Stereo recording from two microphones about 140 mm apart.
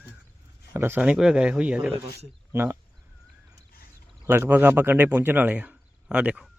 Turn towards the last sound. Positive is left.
turn(degrees=-10)  # may be behind; listen again after turning